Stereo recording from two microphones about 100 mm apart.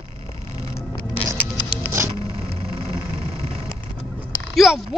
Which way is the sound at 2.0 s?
30° right (ahead or behind).